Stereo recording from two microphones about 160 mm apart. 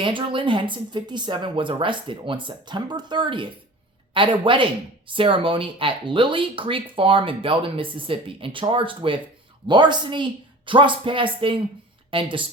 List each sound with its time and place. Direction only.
0.0 s a woman's voice: 30° right (ahead or behind)